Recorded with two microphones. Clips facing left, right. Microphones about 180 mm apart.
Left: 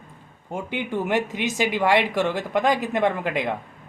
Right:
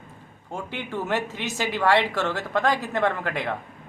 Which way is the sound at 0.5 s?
15° left (ahead or behind).